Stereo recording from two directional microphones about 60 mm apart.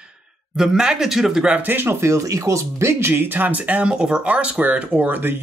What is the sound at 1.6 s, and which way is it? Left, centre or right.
Speech, right.